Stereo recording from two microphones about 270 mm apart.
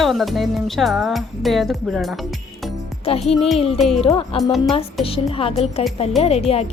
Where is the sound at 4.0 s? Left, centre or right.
Centre.